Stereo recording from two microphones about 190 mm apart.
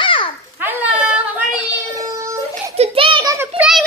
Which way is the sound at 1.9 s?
15° right (ahead or behind).